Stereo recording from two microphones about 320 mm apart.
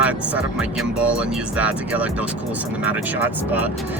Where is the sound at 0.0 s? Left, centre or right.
Centre.